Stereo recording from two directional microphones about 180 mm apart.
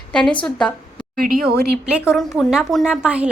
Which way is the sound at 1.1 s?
50° right (ahead or behind).